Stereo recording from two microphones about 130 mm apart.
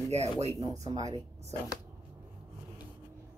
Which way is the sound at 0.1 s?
55° right (ahead or behind).